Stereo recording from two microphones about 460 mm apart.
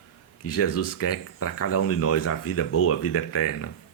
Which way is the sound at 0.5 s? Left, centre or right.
Left.